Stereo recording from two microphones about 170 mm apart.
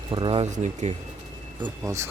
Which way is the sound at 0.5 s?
45° right (ahead or behind).